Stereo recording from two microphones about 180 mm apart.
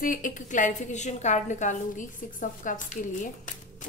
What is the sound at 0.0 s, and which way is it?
A woman's voice, 50° left (ahead or behind).